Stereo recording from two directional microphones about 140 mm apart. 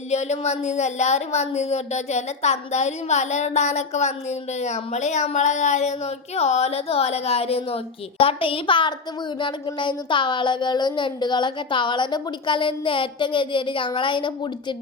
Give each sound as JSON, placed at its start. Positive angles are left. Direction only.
{"t": 0.1, "sound": "speech", "side_deg": 50}